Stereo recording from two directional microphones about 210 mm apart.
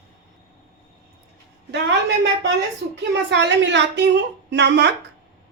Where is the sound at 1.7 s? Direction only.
55° right (ahead or behind).